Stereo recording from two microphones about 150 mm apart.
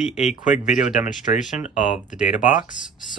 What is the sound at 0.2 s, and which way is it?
Speech, 50° left (ahead or behind).